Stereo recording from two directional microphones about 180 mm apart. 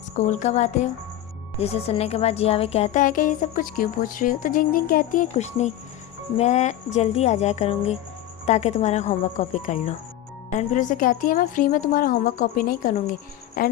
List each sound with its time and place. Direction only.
0.2 s speech: 40° left (ahead or behind)